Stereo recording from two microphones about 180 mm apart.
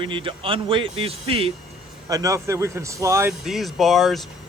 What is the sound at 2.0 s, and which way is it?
Speech, 20° right (ahead or behind).